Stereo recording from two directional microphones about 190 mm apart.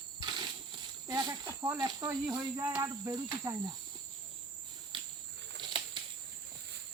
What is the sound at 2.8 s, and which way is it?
Cricket, 20° right (ahead or behind).